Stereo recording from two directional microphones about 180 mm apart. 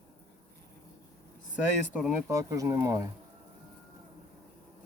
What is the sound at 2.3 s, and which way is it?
Speech, 15° right (ahead or behind).